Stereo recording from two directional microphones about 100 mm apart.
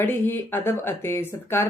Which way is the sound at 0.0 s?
20° left (ahead or behind).